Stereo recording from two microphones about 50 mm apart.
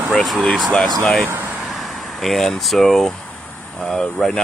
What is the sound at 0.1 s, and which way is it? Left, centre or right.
Speech, centre.